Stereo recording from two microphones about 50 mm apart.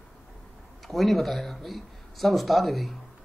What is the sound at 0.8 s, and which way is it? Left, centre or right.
Speech, centre.